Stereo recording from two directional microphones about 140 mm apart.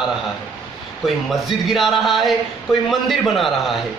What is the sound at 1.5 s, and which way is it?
A man's voice, centre (ahead or behind).